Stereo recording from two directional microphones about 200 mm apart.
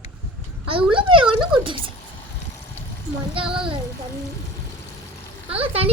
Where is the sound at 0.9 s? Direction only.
25° right (ahead or behind).